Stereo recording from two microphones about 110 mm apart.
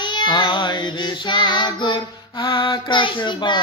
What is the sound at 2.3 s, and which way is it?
Mantra, 50° left (ahead or behind).